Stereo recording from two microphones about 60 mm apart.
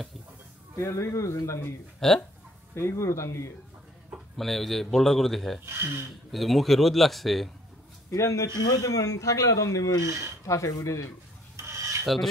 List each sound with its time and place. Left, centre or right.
0.7 s a man's voice: left
2.0 s speech: centre
2.7 s speech: left
4.4 s a man's voice: centre
5.7 s speech: right
6.3 s a man's voice: centre
8.1 s a man's voice: left
11.5 s filing: right